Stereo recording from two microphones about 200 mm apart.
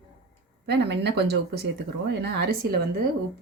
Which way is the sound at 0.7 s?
60° right (ahead or behind).